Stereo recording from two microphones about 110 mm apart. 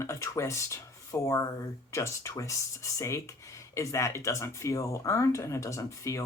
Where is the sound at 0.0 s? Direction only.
25° left (ahead or behind).